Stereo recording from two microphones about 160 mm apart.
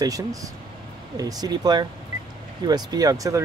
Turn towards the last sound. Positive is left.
turn(degrees=-20)  # may be behind; listen again after turning